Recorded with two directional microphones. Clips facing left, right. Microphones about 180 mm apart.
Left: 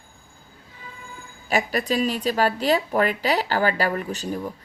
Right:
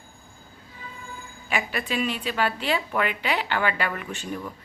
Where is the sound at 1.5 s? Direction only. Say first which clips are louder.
Left 5 dB; 40° left (ahead or behind).